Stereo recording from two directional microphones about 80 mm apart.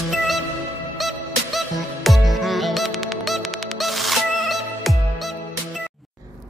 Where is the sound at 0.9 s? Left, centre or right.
Centre.